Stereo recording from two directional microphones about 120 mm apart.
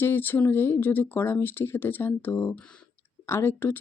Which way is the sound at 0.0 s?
15° left (ahead or behind).